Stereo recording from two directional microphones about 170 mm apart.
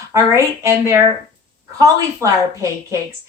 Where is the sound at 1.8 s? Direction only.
20° right (ahead or behind).